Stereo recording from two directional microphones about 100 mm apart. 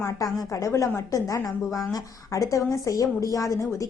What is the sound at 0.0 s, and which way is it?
A woman's voice, 30° left (ahead or behind).